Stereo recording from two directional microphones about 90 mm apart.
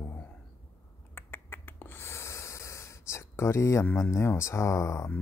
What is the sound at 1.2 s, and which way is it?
Breathing, 25° left (ahead or behind).